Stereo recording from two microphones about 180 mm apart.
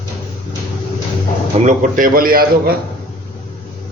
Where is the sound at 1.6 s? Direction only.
45° right (ahead or behind).